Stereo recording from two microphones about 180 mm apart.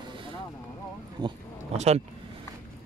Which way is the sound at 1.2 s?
25° right (ahead or behind).